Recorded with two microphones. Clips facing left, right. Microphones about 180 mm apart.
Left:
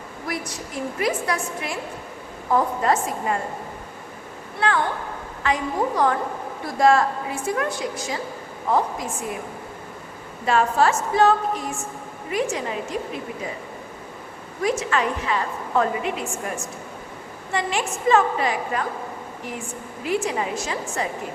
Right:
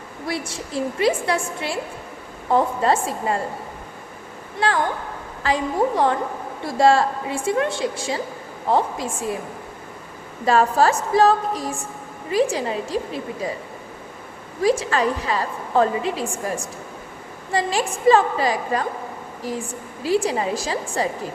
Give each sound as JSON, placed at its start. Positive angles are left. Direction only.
{"t": 0.3, "sound": "a woman's voice", "side_deg": -30}
{"t": 4.6, "sound": "a woman's voice", "side_deg": -30}
{"t": 10.4, "sound": "a woman's voice", "side_deg": -40}
{"t": 14.6, "sound": "a woman's voice", "side_deg": -35}